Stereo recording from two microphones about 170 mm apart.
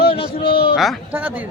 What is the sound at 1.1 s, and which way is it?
Speech, 10° right (ahead or behind).